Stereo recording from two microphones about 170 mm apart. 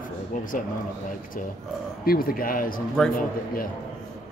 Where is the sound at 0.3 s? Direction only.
50° left (ahead or behind).